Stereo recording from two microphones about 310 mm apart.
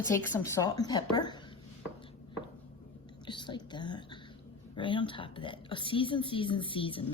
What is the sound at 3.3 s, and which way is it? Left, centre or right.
Whispering, centre.